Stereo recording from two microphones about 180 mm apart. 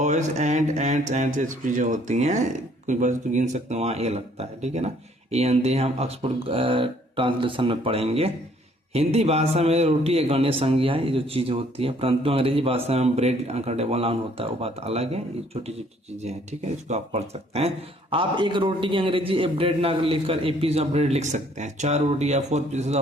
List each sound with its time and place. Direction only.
0.0 s a man's voice: 40° right (ahead or behind)
16.2 s a man's voice: 40° right (ahead or behind)